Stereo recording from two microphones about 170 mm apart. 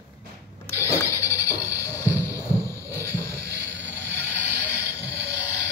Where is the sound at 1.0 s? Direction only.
15° left (ahead or behind).